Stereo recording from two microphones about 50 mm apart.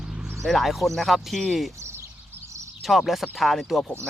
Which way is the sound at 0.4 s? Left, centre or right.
Centre.